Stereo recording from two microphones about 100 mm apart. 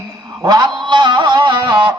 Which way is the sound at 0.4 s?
40° right (ahead or behind).